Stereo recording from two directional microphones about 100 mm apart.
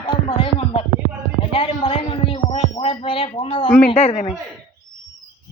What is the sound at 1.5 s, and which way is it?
Speech, 65° left (ahead or behind).